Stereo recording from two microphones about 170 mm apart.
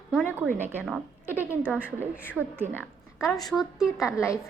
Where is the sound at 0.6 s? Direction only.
10° right (ahead or behind).